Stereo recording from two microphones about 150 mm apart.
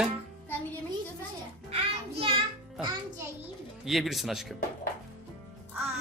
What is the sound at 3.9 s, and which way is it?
Speech, centre (ahead or behind).